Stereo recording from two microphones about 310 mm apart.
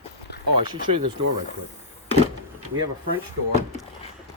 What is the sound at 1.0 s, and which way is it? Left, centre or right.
Speech, right.